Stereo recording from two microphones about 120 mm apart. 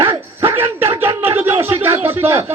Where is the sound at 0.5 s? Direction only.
20° right (ahead or behind).